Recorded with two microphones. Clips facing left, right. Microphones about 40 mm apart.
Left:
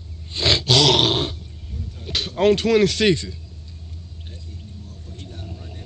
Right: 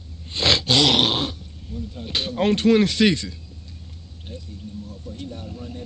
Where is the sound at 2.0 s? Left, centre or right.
Right.